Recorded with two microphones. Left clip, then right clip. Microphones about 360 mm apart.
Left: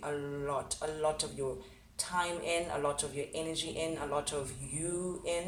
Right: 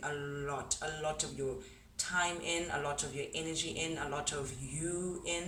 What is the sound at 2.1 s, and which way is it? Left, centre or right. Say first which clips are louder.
A man's voice: left 2 dB; centre.